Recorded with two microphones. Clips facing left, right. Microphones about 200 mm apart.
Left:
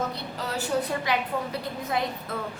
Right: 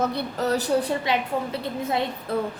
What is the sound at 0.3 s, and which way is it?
A woman's voice, 40° right (ahead or behind).